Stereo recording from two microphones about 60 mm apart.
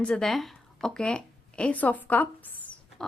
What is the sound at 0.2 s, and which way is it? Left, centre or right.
A woman's voice, centre.